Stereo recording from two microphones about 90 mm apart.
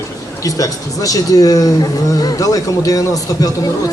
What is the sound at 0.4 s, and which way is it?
A man's voice, 40° left (ahead or behind).